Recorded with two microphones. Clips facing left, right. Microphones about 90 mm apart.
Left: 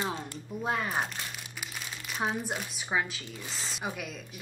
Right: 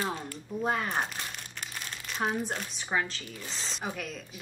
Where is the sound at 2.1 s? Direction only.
5° left (ahead or behind).